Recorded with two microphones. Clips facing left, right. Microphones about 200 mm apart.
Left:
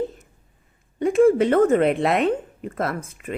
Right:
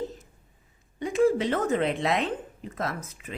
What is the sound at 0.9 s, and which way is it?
A woman's voice, 55° left (ahead or behind).